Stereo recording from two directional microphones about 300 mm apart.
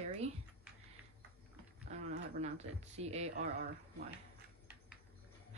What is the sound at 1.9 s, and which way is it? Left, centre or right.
Speech, right.